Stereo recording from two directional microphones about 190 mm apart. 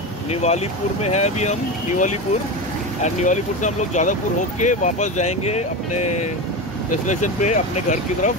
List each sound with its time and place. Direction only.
0.3 s speech: 35° left (ahead or behind)
7.1 s speech: 40° left (ahead or behind)